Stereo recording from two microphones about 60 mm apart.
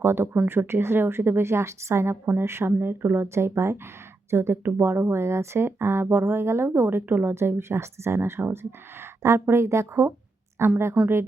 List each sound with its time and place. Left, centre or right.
0.0 s speech: right
11.0 s speech: right